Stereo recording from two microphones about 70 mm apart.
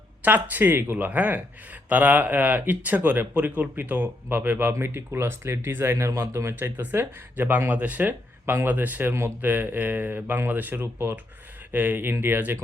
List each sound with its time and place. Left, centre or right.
0.2 s speech: right